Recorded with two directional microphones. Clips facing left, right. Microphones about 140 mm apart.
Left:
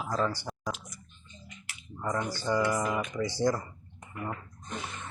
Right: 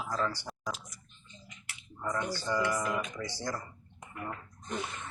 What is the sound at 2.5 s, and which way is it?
Speech, 20° left (ahead or behind).